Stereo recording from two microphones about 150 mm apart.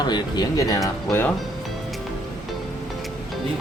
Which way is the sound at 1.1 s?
15° left (ahead or behind).